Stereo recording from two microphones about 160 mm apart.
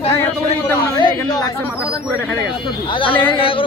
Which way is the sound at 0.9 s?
25° left (ahead or behind).